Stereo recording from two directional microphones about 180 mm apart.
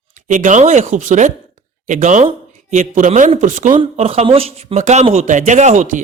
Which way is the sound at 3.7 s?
30° right (ahead or behind).